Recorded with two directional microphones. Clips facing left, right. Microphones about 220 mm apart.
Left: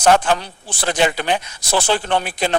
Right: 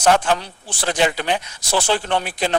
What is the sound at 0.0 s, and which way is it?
Speech, 50° left (ahead or behind).